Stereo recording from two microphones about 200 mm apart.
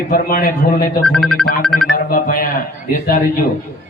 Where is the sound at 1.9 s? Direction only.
45° left (ahead or behind).